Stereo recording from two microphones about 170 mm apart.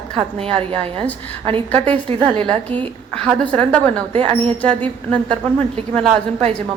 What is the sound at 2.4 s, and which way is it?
A woman's voice, 5° left (ahead or behind).